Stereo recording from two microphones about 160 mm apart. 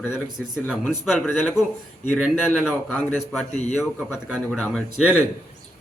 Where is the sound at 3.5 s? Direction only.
45° left (ahead or behind).